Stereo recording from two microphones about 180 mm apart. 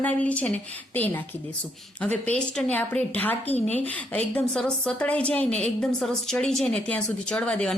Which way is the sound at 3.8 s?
5° left (ahead or behind).